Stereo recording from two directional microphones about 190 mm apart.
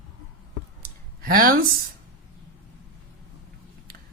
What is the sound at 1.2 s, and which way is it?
Speech, 50° right (ahead or behind).